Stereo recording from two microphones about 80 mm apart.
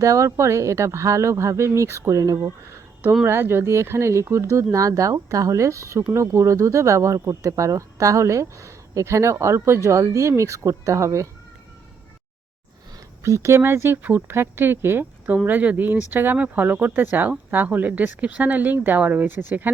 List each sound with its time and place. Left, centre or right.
0.0 s speech: right
3.2 s speech: right
13.2 s speech: right